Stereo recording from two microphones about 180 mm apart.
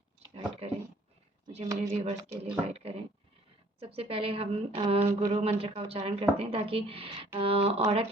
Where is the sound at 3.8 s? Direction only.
30° right (ahead or behind).